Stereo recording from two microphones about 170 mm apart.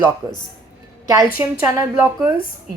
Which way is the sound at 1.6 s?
20° right (ahead or behind).